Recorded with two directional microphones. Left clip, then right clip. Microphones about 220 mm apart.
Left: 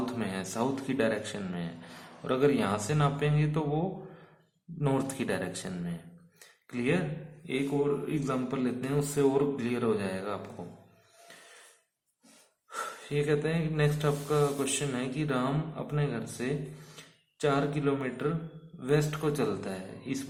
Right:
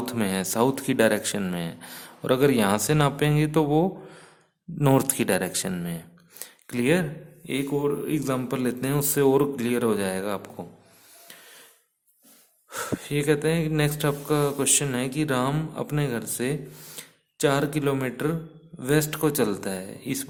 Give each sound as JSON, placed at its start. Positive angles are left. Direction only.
{"t": 0.0, "sound": "speech", "side_deg": -50}
{"t": 8.0, "sound": "speech", "side_deg": -50}
{"t": 12.7, "sound": "speech", "side_deg": -45}